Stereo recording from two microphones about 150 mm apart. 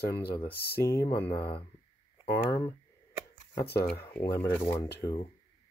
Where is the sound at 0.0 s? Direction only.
90° left.